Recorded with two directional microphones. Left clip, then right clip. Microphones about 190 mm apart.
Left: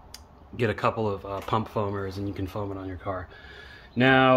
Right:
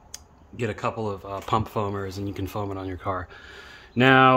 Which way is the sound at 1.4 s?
25° right (ahead or behind).